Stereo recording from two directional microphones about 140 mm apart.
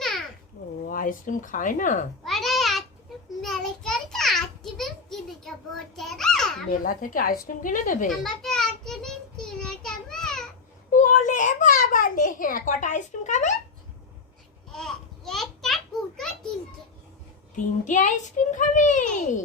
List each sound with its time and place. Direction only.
0.9 s speech: 80° left
2.2 s babbling: centre (ahead or behind)
3.4 s a sound: 5° left (ahead or behind)
6.7 s speech: 80° left
7.4 s a woman's voice: 75° left (ahead or behind)
8.2 s child singing: 5° left (ahead or behind)
11.0 s a sound: 65° left (ahead or behind)
14.7 s a sound: 5° left (ahead or behind)
17.6 s a child's voice: 65° left (ahead or behind)